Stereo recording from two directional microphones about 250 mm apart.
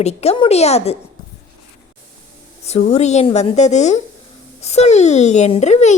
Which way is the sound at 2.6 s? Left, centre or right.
Left.